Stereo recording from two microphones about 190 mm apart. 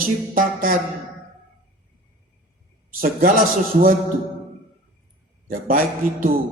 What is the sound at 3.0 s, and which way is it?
Mantra, 45° right (ahead or behind).